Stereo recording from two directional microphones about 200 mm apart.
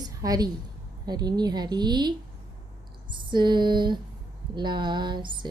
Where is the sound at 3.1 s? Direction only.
20° right (ahead or behind).